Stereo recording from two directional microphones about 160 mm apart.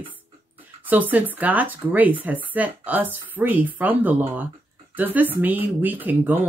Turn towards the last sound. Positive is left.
turn(degrees=-10)  # may be behind; listen again after turning